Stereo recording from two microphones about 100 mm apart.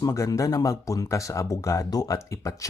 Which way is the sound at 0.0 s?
35° left (ahead or behind).